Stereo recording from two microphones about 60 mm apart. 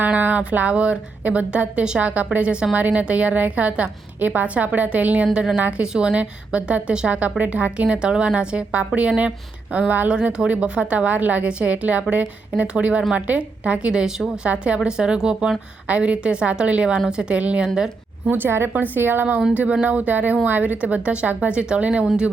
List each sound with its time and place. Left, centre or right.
0.0 s a woman's voice: right
10.1 s a woman's voice: centre
18.3 s a woman's voice: right
19.5 s a woman's voice: right